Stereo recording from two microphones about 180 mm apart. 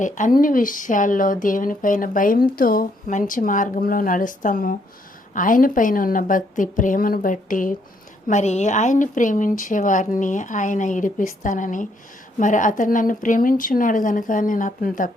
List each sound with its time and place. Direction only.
0.0 s speech: 45° left (ahead or behind)